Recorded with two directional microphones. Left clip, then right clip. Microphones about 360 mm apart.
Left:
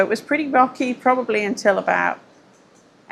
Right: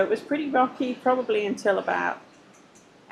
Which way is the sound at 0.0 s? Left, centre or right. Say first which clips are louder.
Left 5 dB; left.